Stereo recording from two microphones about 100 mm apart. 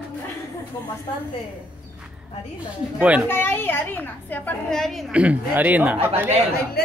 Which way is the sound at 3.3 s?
20° left (ahead or behind).